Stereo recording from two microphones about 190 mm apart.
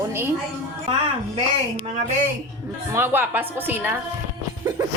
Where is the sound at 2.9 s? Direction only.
10° right (ahead or behind).